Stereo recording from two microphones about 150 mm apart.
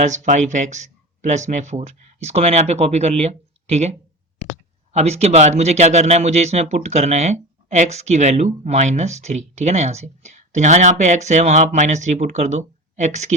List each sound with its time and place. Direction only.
0.0 s speech: 55° right (ahead or behind)